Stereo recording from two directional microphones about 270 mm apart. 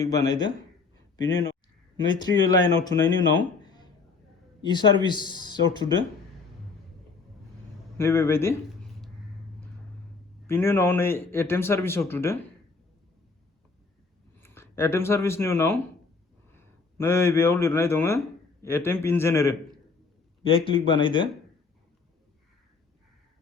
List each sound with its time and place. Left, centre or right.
0.0 s a man's voice: centre
2.0 s a man's voice: centre
7.9 s speech: centre
10.4 s a man's voice: centre
14.3 s a man's voice: centre